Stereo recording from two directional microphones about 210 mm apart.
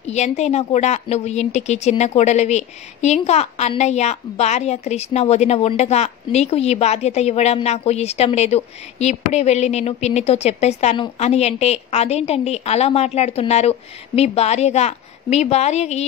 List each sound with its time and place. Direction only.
0.0 s a woman's voice: 30° left (ahead or behind)